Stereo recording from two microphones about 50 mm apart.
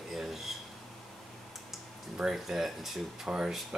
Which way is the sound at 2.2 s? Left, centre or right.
Centre.